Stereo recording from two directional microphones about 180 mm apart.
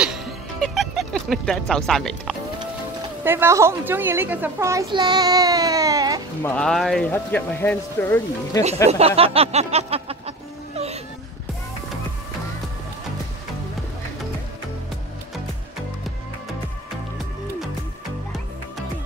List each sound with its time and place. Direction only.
0.0 s music: centre (ahead or behind)
3.3 s a child's voice: 15° right (ahead or behind)
6.4 s speech: 5° left (ahead or behind)
8.9 s speech: 35° right (ahead or behind)